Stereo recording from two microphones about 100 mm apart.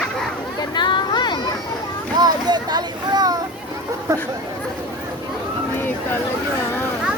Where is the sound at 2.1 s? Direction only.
45° right (ahead or behind).